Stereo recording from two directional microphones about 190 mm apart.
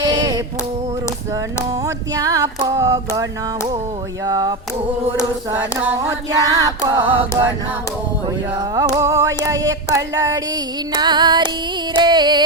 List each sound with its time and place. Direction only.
0.0 s a sound: 20° right (ahead or behind)
1.7 s music: 20° right (ahead or behind)
4.3 s music: 20° right (ahead or behind)
8.7 s music: 20° right (ahead or behind)